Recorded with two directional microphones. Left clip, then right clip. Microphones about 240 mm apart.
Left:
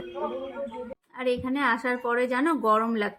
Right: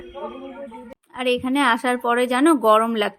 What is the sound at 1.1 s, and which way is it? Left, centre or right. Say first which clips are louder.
A woman's voice: right 7 dB; right.